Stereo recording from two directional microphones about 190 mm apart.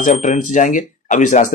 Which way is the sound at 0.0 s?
40° left (ahead or behind).